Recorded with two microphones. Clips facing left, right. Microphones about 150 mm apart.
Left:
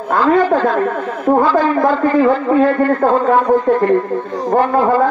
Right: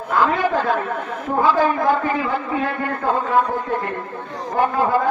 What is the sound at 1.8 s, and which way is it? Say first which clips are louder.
A man's voice: left 7 dB; 50° left (ahead or behind).